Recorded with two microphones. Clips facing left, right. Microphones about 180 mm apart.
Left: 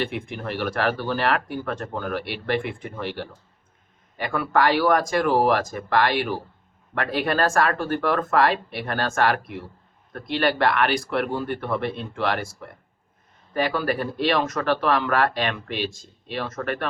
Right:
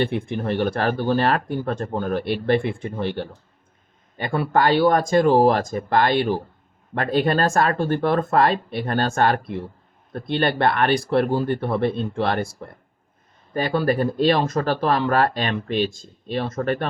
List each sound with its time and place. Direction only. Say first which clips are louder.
0.3 s speech: right 6 dB; 30° right (ahead or behind)
4.3 s speech: right 2 dB; 30° right (ahead or behind)
13.5 s speech: right 3 dB; 30° right (ahead or behind)